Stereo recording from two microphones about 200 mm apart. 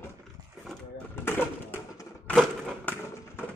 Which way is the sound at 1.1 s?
10° left (ahead or behind).